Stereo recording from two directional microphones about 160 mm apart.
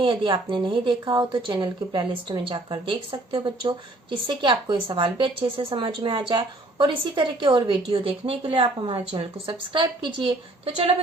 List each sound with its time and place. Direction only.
0.0 s a woman's voice: 30° right (ahead or behind)